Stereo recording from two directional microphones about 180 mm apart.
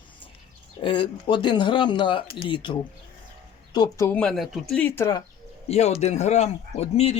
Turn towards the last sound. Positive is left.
turn(degrees=35)  # may be behind; listen again after turning